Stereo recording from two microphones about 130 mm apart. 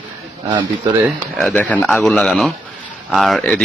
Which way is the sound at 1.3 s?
10° left (ahead or behind).